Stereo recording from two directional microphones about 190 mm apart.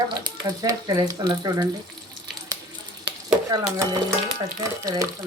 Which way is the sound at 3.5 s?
20° right (ahead or behind).